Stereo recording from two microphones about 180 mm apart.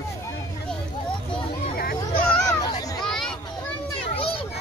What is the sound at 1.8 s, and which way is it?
Hubbub, 55° left (ahead or behind).